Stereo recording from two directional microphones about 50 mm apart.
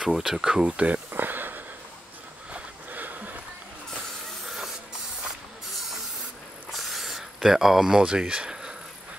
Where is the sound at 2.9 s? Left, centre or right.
Right.